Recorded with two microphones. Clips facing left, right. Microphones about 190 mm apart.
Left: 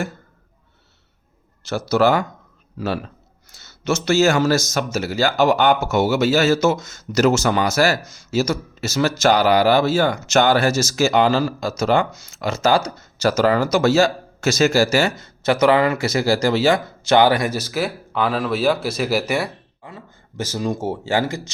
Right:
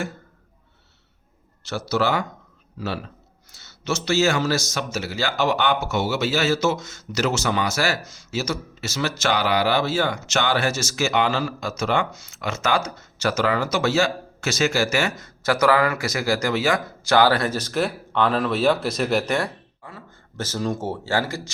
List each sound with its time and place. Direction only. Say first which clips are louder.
1.6 s speech: left 6 dB; 45° left (ahead or behind); by 21.5 s 20° left (ahead or behind)